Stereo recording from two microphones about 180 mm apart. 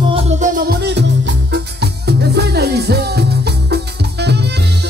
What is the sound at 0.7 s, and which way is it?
Music, 65° right (ahead or behind).